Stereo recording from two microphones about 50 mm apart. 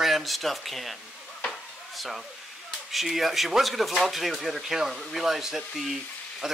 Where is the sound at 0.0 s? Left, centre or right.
Centre.